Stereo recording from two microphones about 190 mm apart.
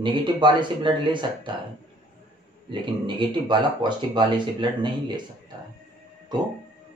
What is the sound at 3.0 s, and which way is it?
Speech, 25° right (ahead or behind).